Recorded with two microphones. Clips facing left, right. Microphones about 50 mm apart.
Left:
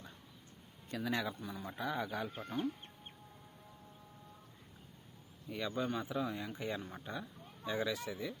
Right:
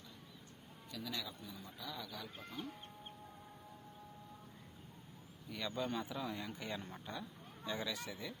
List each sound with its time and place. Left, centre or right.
0.9 s speech: left
2.4 s speech: centre
5.5 s speech: centre